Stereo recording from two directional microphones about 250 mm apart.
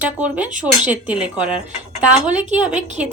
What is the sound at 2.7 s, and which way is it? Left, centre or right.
Speech, right.